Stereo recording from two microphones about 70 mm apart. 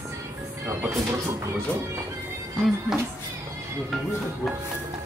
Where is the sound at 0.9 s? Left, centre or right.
Right.